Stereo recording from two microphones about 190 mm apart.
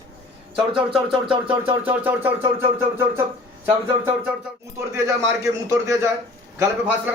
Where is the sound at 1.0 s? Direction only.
25° right (ahead or behind).